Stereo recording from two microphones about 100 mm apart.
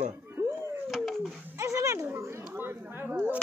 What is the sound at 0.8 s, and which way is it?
Howl, centre (ahead or behind).